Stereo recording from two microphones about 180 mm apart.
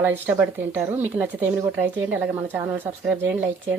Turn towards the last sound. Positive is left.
turn(degrees=-10)  # may be behind; listen again after turning